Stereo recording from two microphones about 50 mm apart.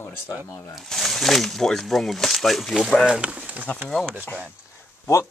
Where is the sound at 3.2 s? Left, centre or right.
Right.